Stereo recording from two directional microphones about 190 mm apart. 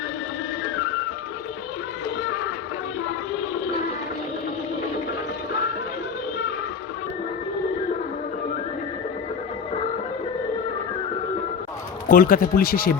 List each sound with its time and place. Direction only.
12.0 s a man's voice: 50° left (ahead or behind)